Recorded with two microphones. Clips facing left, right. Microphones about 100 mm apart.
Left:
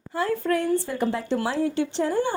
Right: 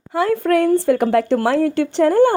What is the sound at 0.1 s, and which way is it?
A woman's voice, 85° right.